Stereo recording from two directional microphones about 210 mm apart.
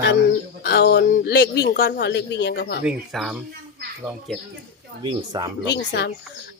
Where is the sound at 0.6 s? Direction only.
50° left (ahead or behind).